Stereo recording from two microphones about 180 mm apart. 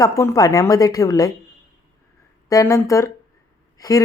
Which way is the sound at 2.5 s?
15° left (ahead or behind).